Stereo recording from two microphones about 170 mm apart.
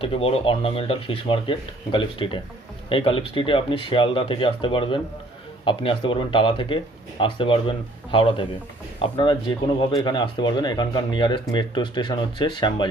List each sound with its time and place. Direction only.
0.0 s speech: 35° left (ahead or behind)